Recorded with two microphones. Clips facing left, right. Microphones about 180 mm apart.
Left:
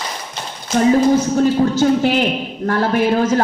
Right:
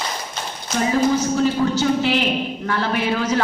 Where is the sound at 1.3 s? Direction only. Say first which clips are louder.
Left 4 dB; 50° left (ahead or behind).